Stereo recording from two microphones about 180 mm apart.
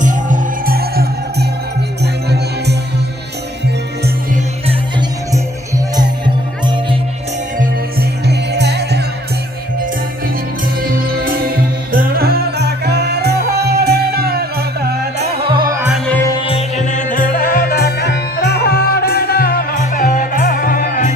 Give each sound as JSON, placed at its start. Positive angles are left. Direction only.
{"t": 0.0, "sound": "music", "side_deg": -45}
{"t": 5.9, "sound": "music", "side_deg": -25}
{"t": 7.5, "sound": "music", "side_deg": -55}
{"t": 10.8, "sound": "music", "side_deg": -55}
{"t": 16.2, "sound": "music", "side_deg": 25}